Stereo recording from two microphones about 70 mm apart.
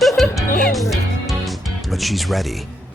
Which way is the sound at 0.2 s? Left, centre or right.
Centre.